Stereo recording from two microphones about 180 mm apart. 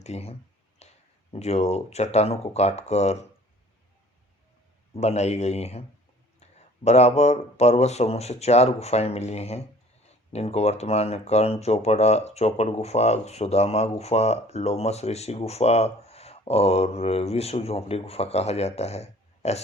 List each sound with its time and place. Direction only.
0.0 s speech: 35° left (ahead or behind)
0.8 s a sound: 35° left (ahead or behind)
1.3 s speech: 35° left (ahead or behind)
4.9 s speech: 40° left (ahead or behind)